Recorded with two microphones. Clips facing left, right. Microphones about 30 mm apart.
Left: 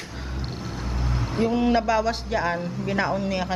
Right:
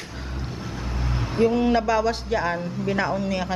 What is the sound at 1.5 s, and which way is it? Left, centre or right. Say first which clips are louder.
Speech: left 2 dB; centre.